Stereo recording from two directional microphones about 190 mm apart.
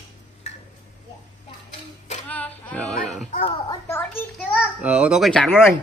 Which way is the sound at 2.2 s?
10° left (ahead or behind).